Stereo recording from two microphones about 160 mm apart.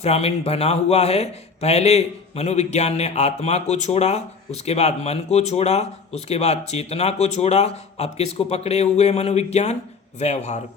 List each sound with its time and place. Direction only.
0.0 s a man's voice: 40° left (ahead or behind)